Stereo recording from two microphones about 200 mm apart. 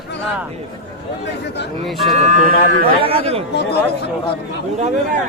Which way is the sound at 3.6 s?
55° left (ahead or behind).